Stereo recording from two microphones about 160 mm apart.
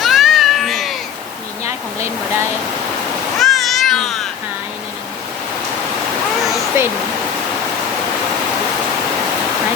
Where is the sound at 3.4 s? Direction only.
Centre (ahead or behind).